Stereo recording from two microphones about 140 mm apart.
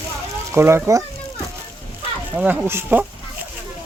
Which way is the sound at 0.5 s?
20° right (ahead or behind).